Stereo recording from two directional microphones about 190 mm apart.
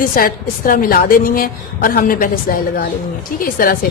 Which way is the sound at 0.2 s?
50° left (ahead or behind).